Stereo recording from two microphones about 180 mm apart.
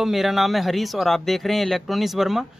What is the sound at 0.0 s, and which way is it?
Speech, centre (ahead or behind).